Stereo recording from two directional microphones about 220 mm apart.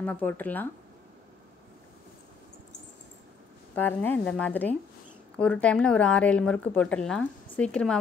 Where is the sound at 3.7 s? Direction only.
10° left (ahead or behind).